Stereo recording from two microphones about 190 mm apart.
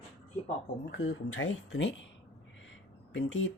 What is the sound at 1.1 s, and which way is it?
Speech, 90° left.